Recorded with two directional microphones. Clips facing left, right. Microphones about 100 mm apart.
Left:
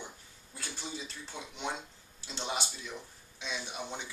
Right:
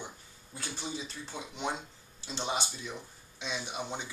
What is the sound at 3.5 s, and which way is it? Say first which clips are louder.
Speech: right 3 dB; 20° right (ahead or behind).